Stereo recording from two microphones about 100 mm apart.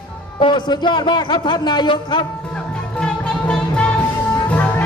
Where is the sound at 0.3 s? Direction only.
55° left (ahead or behind).